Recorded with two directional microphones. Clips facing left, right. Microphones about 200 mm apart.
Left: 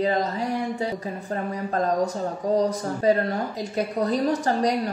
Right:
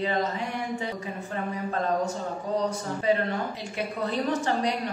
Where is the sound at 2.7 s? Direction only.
40° left (ahead or behind).